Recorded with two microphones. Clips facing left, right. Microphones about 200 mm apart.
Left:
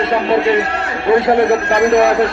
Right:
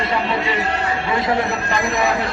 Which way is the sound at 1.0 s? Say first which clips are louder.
Left 11 dB; 60° left (ahead or behind).